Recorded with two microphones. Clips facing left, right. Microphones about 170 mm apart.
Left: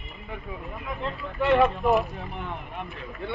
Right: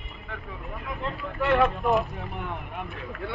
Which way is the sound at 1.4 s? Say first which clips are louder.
Left 2 dB; centre (ahead or behind).